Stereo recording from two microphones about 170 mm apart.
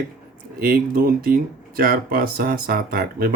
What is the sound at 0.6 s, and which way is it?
Speech, 65° right (ahead or behind).